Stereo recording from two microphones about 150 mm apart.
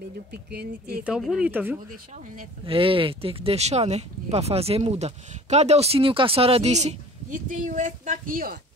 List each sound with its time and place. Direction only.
0.3 s speech: 90° right
1.0 s speech: 5° right (ahead or behind)
2.6 s speech: 35° right (ahead or behind); by 8.5 s 65° right (ahead or behind)